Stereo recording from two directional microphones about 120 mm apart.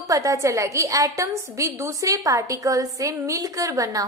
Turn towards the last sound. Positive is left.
turn(degrees=-30)  # may be behind; listen again after turning